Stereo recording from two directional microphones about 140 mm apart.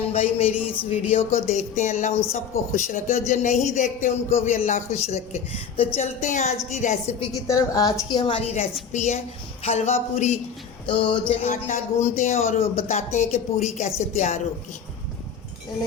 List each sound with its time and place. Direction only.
0.1 s speech: 45° left (ahead or behind)
4.5 s speech: 65° left (ahead or behind)
7.4 s a woman's voice: 25° left (ahead or behind); by 8.6 s 45° left (ahead or behind)
8.9 s speech: 55° left (ahead or behind)
10.8 s a sound: 35° left (ahead or behind)
11.4 s speech: 55° left (ahead or behind)